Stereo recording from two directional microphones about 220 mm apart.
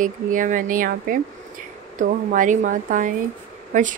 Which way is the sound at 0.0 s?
35° right (ahead or behind).